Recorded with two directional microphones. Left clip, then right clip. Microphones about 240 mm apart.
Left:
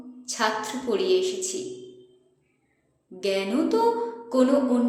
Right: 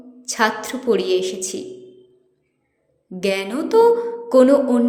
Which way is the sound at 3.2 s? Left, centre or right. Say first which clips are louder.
Right 3 dB; right.